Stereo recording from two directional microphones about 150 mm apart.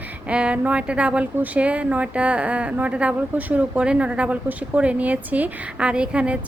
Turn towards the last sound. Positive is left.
turn(degrees=-10)  # may be behind; listen again after turning